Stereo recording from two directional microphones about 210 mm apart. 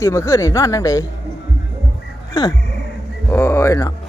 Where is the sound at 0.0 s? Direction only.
15° left (ahead or behind).